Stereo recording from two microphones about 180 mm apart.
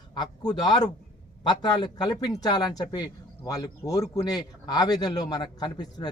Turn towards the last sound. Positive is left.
turn(degrees=25)  # may be behind; listen again after turning